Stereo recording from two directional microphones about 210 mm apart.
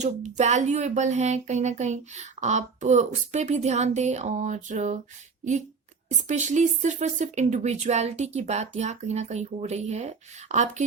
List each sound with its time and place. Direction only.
0.0 s speech: 35° right (ahead or behind)
6.1 s speech: 35° right (ahead or behind)